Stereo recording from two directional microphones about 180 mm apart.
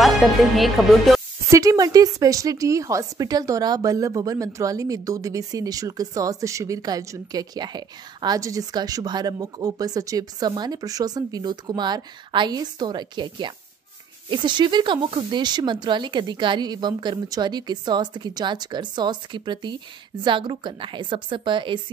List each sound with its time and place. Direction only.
0.0 s music: centre (ahead or behind)
1.5 s a woman's voice: 20° right (ahead or behind)